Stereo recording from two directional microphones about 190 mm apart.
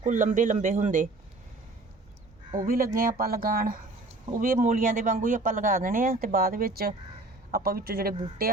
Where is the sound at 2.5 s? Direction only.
45° right (ahead or behind).